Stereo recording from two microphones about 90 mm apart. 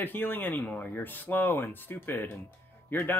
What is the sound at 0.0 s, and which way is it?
Speech, 20° left (ahead or behind).